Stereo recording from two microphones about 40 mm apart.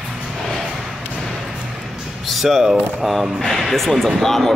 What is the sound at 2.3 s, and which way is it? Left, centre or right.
Speech, centre.